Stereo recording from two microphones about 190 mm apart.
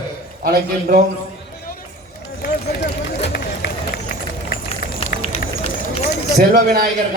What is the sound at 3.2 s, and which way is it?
Run, 55° left (ahead or behind).